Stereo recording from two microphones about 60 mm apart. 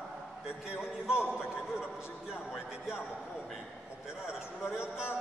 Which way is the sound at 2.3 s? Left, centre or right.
Centre.